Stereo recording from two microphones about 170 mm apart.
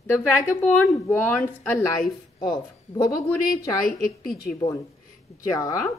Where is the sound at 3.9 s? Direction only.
60° left (ahead or behind).